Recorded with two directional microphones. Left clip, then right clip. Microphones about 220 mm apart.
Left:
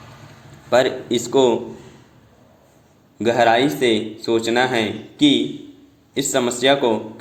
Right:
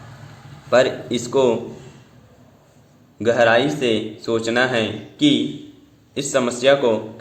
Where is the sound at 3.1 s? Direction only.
15° left (ahead or behind).